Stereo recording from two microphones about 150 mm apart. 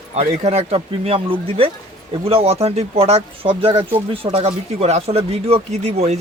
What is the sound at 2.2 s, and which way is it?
Speech, 40° right (ahead or behind).